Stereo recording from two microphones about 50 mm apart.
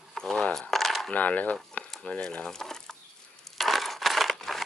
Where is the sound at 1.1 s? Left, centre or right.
Left.